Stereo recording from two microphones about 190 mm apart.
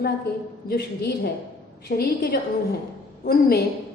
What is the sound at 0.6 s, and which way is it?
A woman's voice, 60° left (ahead or behind).